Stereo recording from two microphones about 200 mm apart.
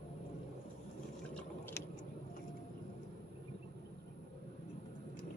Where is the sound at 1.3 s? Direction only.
10° left (ahead or behind).